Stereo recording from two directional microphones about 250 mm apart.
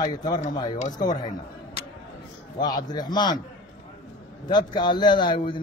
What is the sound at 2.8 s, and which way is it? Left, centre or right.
Speech, centre.